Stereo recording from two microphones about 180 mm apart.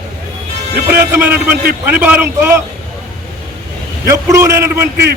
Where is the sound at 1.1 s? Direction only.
10° right (ahead or behind).